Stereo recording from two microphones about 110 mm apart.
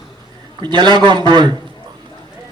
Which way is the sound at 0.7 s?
45° right (ahead or behind).